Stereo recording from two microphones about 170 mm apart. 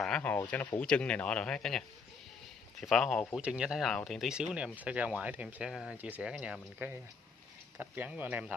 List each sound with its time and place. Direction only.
0.0 s speech: 5° left (ahead or behind); by 8.5 s 10° right (ahead or behind)